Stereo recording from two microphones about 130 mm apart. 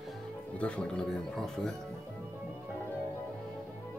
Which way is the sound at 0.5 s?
10° left (ahead or behind).